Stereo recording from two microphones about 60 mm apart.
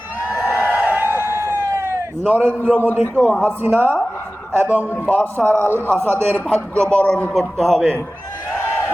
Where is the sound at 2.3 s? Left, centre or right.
Left.